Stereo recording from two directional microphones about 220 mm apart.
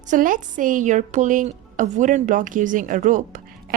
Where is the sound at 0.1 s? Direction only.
35° right (ahead or behind).